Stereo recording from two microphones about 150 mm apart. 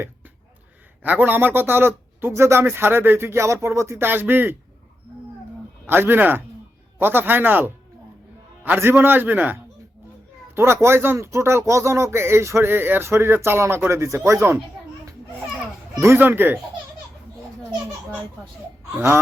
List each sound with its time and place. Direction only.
1.0 s speech: 10° right (ahead or behind)
5.9 s speech: 15° right (ahead or behind)
16.0 s speech: 15° right (ahead or behind)
18.9 s speech: 15° right (ahead or behind)